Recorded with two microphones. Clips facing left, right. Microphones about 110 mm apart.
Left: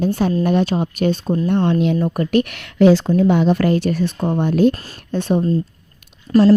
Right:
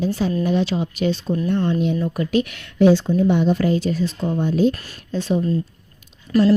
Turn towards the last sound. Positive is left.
turn(degrees=35)  # may be behind; listen again after turning